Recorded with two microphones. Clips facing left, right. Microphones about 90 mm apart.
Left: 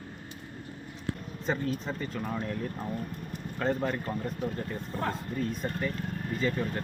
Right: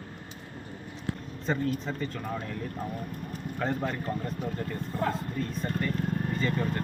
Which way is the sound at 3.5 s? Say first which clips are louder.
Left 2 dB; centre (ahead or behind).